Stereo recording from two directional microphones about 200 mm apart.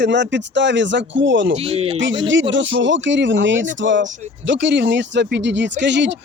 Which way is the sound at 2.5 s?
65° right (ahead or behind).